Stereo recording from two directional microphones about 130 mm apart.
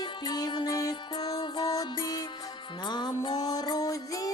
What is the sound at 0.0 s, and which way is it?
Music, 35° left (ahead or behind).